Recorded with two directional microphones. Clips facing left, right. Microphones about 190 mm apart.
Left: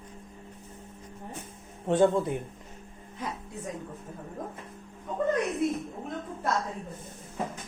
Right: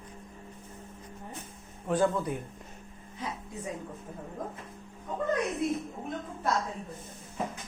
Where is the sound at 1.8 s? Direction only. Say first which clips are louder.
Left 4 dB; 25° left (ahead or behind).